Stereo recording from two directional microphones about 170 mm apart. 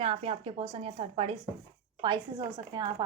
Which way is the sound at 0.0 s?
35° right (ahead or behind).